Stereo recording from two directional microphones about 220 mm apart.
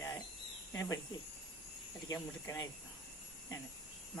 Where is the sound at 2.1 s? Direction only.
15° left (ahead or behind).